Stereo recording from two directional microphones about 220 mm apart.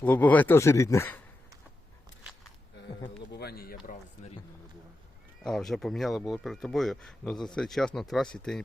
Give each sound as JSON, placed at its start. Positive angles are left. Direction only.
{"t": 0.0, "sound": "speech", "side_deg": 5}
{"t": 3.3, "sound": "a sound", "side_deg": 45}
{"t": 5.4, "sound": "speech", "side_deg": 0}